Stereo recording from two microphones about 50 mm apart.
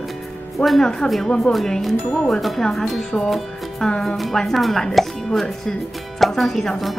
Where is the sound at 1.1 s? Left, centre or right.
Centre.